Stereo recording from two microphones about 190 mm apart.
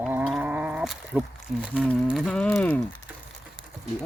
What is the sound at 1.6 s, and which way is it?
Speech, 5° right (ahead or behind).